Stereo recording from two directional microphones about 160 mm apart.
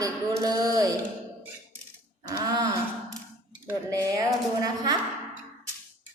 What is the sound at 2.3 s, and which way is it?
A woman's voice, 25° right (ahead or behind).